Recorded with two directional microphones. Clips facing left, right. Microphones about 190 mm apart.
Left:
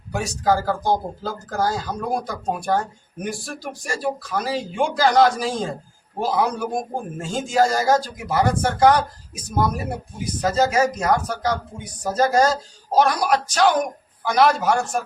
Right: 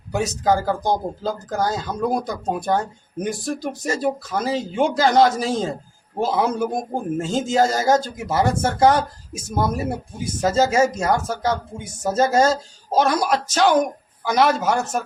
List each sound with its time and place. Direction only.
0.1 s speech: 20° right (ahead or behind)